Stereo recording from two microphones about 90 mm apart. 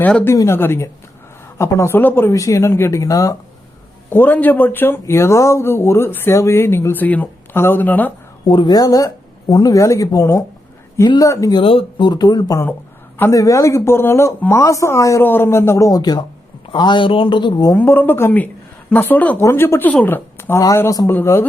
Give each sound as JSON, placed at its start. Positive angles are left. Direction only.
{"t": 0.0, "sound": "speech", "side_deg": 15}
{"t": 0.4, "sound": "speech", "side_deg": 25}
{"t": 2.3, "sound": "speech", "side_deg": 35}
{"t": 4.1, "sound": "speech", "side_deg": 20}
{"t": 8.4, "sound": "speech", "side_deg": 55}
{"t": 11.5, "sound": "speech", "side_deg": 85}
{"t": 15.2, "sound": "speech", "side_deg": 25}
{"t": 16.0, "sound": "speech", "side_deg": 50}
{"t": 17.8, "sound": "a woman's voice", "side_deg": 25}